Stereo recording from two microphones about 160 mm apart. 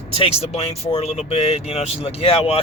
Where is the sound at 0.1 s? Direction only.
35° left (ahead or behind).